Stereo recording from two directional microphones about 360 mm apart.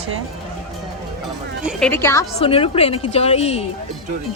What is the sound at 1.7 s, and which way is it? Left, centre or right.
A woman's voice, centre.